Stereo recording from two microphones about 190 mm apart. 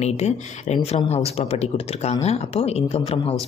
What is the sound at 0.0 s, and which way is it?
Speech, 35° left (ahead or behind).